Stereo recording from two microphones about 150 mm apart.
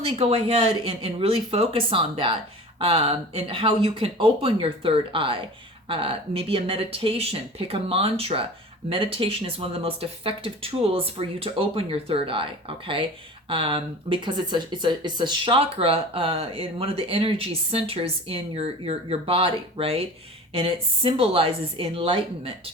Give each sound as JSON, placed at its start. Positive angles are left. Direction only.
{"t": 0.0, "sound": "speech", "side_deg": -40}